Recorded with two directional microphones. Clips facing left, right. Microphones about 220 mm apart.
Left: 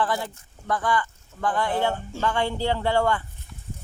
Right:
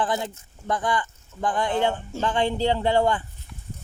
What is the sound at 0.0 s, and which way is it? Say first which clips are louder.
A man's voice: even; 20° right (ahead or behind).